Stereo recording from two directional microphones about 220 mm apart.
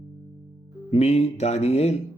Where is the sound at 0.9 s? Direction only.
30° left (ahead or behind).